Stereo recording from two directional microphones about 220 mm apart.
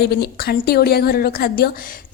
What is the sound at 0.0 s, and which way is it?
A woman's voice, 45° left (ahead or behind).